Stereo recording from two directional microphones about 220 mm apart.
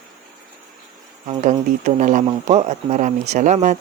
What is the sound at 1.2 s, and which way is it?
Speech, 30° right (ahead or behind).